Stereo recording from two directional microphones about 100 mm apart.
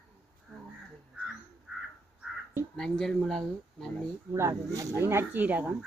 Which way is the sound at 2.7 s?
5° left (ahead or behind).